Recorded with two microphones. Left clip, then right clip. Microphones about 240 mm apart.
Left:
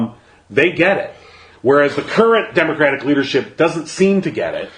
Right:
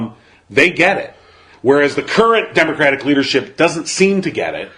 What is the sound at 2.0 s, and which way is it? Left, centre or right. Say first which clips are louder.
A man's voice: right 1 dB; right.